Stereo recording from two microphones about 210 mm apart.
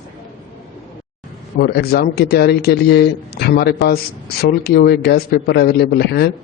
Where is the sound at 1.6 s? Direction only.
50° left (ahead or behind).